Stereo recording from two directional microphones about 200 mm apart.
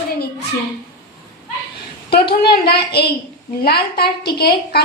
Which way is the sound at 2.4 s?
50° left (ahead or behind).